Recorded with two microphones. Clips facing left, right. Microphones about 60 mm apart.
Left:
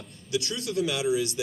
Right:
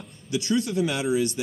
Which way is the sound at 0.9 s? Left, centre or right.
Right.